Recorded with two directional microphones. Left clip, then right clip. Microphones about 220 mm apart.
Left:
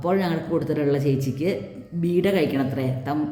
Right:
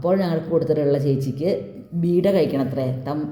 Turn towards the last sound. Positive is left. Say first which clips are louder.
# right 2 dB
turn(degrees=-5)  # may be behind; listen again after turning